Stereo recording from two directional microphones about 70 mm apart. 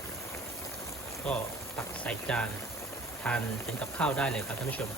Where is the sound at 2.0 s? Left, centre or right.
Centre.